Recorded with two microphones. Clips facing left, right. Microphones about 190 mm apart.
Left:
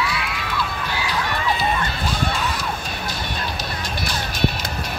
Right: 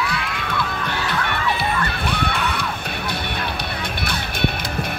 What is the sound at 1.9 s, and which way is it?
Music, 65° right (ahead or behind).